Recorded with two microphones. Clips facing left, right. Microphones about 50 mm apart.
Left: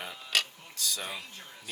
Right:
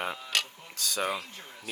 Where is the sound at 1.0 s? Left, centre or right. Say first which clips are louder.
Right 8 dB; right.